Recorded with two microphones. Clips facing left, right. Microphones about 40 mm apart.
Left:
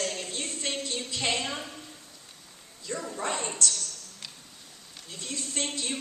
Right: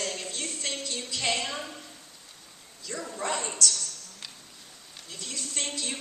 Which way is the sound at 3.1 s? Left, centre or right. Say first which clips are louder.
Right 2 dB; left.